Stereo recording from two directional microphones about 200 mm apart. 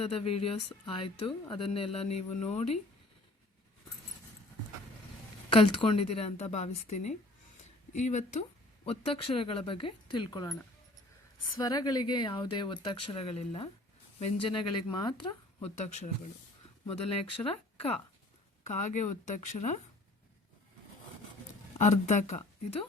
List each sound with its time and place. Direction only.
0.0 s speech: 30° left (ahead or behind)
5.5 s speech: 25° left (ahead or behind)
7.9 s speech: 35° left (ahead or behind)
11.5 s speech: 20° left (ahead or behind)
16.8 s speech: 30° left (ahead or behind)
21.8 s speech: 35° left (ahead or behind)